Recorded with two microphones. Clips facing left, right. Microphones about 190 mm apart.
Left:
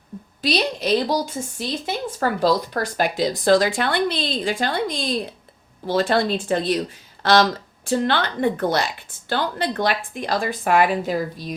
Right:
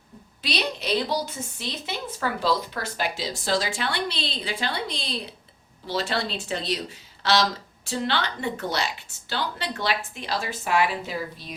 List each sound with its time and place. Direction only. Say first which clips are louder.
0.4 s speech: left 6 dB; 45° left (ahead or behind)